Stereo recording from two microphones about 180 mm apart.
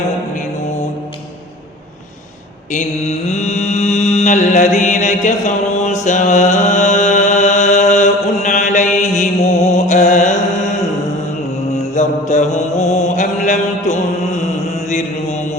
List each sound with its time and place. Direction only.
2.7 s mantra: 40° left (ahead or behind)
11.8 s mantra: 40° left (ahead or behind)